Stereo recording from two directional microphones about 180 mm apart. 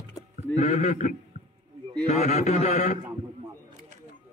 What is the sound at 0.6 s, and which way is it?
Speech, 45° left (ahead or behind).